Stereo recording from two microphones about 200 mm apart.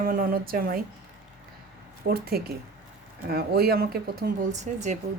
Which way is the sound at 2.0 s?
50° right (ahead or behind).